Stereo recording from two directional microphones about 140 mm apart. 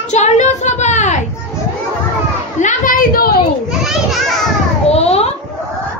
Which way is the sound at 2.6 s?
65° left (ahead or behind).